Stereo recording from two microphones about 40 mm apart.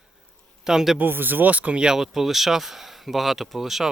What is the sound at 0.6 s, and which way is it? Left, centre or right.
Speech, centre.